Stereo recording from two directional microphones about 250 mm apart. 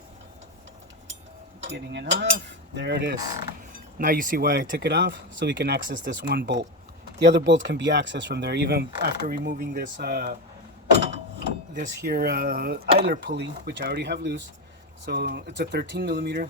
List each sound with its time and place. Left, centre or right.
1.7 s speech: right
11.3 s a sound: right
12.0 s speech: right